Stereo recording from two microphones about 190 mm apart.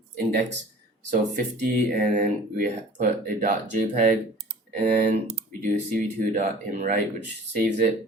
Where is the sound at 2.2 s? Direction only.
40° right (ahead or behind).